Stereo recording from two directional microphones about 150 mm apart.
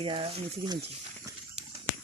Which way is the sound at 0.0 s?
35° right (ahead or behind).